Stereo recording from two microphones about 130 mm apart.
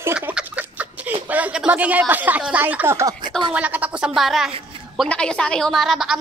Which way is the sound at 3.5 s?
10° right (ahead or behind).